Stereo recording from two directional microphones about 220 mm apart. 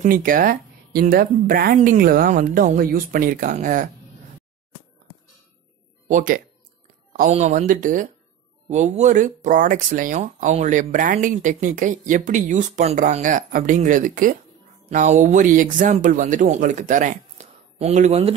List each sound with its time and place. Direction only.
0.0 s speech: 40° right (ahead or behind)
6.0 s speech: 35° right (ahead or behind)